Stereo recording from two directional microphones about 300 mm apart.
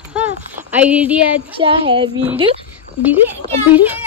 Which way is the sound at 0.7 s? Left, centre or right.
Centre.